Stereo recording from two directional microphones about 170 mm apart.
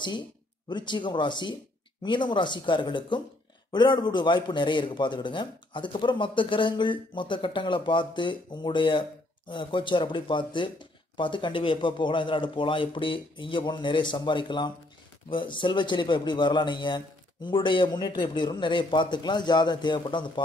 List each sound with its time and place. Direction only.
0.7 s a man's voice: 25° left (ahead or behind)